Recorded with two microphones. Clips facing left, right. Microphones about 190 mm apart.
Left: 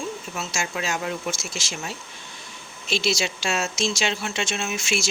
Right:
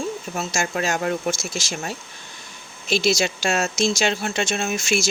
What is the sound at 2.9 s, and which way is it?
Speech, 45° right (ahead or behind).